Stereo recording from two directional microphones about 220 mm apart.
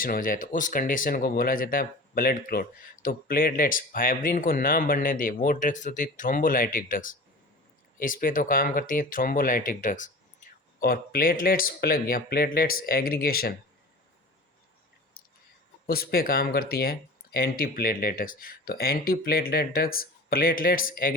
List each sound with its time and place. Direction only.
0.0 s speech: 40° left (ahead or behind)
15.9 s speech: 45° left (ahead or behind)